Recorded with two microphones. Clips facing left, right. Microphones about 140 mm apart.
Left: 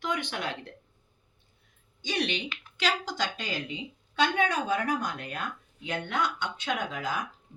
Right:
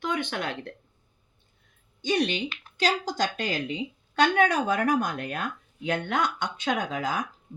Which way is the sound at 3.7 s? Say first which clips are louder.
Right 6 dB; 90° right.